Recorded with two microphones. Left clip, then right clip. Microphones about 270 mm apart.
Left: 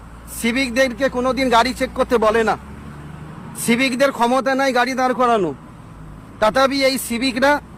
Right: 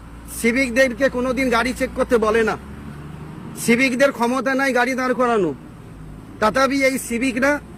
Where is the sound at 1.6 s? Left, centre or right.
Centre.